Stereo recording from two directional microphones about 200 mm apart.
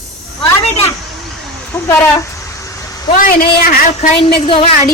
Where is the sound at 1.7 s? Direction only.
15° left (ahead or behind).